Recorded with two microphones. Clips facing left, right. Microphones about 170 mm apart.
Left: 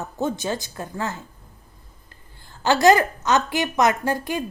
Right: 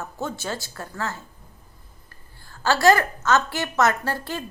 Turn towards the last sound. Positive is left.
turn(degrees=15)  # may be behind; listen again after turning